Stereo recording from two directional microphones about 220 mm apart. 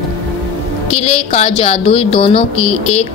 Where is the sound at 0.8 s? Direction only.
30° left (ahead or behind).